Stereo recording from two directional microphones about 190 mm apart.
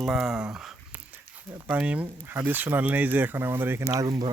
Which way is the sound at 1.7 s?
5° right (ahead or behind).